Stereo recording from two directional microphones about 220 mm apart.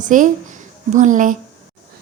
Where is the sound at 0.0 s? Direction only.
35° right (ahead or behind).